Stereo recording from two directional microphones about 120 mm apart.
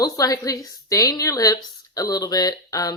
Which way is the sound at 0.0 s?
30° left (ahead or behind).